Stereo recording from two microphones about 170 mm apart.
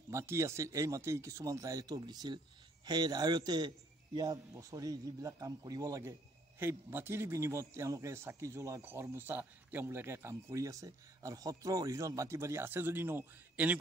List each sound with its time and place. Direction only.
0.1 s a man's voice: 15° right (ahead or behind)